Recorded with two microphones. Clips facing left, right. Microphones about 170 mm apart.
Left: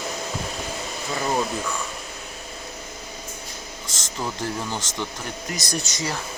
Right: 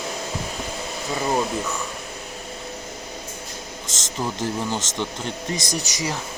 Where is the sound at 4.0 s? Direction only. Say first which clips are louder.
Right 2 dB; 20° right (ahead or behind).